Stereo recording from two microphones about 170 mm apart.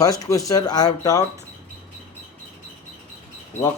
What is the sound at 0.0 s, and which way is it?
Speech, 20° left (ahead or behind).